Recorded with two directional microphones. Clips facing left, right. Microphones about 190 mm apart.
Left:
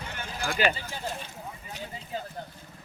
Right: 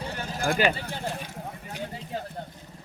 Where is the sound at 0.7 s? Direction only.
60° right (ahead or behind).